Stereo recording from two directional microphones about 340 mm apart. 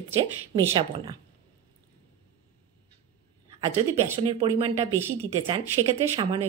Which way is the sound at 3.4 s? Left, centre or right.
Centre.